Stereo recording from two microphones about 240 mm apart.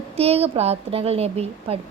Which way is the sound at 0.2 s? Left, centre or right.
Right.